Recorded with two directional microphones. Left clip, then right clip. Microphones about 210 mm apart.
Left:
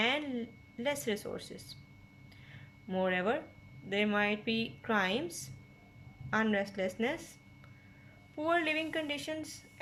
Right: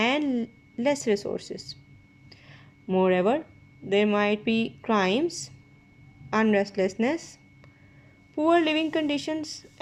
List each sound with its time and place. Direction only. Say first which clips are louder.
0.0 s speech: right 7 dB; 25° right (ahead or behind)
2.3 s a sound: right 5 dB; 20° right (ahead or behind)
3.8 s speech: right 8 dB; 25° right (ahead or behind)
8.4 s speech: right 9 dB; 25° right (ahead or behind)